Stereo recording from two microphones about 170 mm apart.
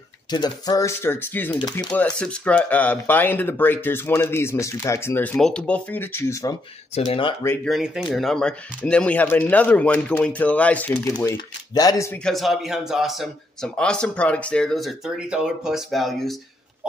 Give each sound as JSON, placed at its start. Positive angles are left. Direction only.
{"t": 0.3, "sound": "speech", "side_deg": 25}
{"t": 2.0, "sound": "speech", "side_deg": 5}
{"t": 7.1, "sound": "speech", "side_deg": 30}
{"t": 7.6, "sound": "speech", "side_deg": 0}
{"t": 11.7, "sound": "speech", "side_deg": 20}
{"t": 12.2, "sound": "speech", "side_deg": 0}